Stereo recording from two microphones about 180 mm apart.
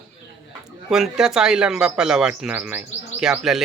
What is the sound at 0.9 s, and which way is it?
Speech, 5° right (ahead or behind).